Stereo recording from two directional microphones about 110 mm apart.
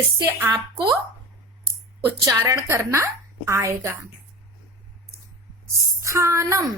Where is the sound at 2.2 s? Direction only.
30° right (ahead or behind).